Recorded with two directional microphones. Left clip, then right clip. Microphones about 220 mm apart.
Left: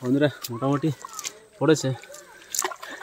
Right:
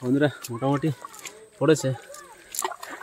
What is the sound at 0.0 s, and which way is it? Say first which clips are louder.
Speech: left 1 dB; centre (ahead or behind).